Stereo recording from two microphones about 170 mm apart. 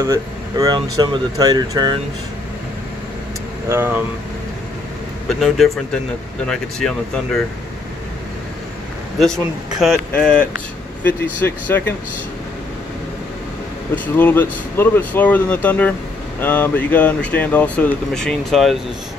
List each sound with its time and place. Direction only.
0.0 s speech: 20° right (ahead or behind)
3.6 s speech: 15° right (ahead or behind)
5.3 s speech: centre (ahead or behind)
9.2 s speech: centre (ahead or behind)
13.9 s speech: 10° left (ahead or behind)